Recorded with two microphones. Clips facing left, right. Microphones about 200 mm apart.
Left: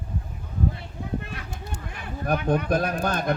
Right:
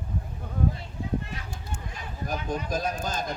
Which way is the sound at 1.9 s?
65° left (ahead or behind).